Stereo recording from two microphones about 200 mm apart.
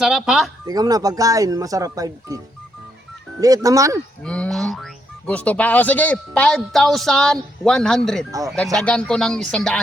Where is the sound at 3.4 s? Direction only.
15° right (ahead or behind).